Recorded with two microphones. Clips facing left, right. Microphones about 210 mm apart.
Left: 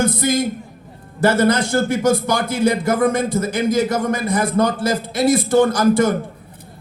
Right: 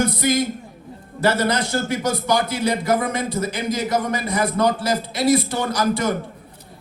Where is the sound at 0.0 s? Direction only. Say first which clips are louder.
Left 2 dB; 50° left (ahead or behind).